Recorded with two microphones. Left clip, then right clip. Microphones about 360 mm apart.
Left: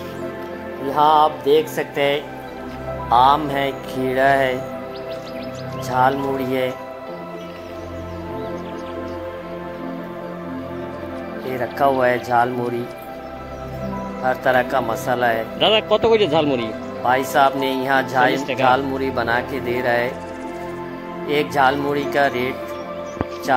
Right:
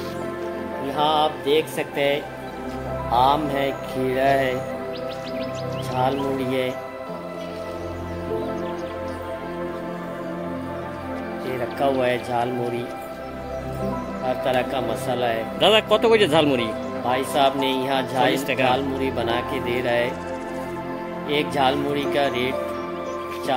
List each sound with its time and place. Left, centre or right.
0.9 s speech: centre
3.4 s speech: centre
5.9 s speech: centre
11.8 s speech: centre
14.4 s speech: centre
21.3 s speech: centre